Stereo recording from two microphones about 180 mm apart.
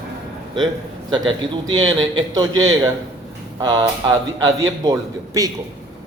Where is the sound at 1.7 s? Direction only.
25° right (ahead or behind).